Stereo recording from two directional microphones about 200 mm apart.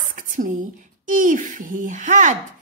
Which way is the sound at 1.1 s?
40° right (ahead or behind).